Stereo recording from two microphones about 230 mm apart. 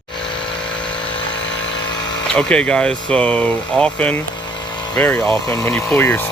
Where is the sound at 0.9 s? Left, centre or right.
Left.